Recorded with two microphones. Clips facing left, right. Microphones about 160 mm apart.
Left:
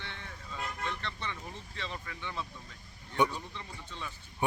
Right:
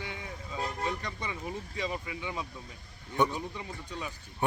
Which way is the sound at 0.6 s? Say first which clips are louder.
Right 5 dB; 35° right (ahead or behind).